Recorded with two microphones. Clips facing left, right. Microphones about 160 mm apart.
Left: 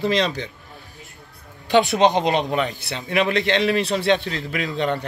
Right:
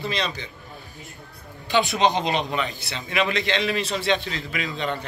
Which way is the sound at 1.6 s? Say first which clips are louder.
Left 4 dB; 65° left (ahead or behind).